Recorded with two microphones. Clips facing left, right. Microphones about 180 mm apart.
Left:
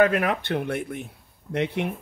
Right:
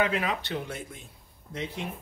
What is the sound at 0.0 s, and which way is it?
Speech, 55° left (ahead or behind).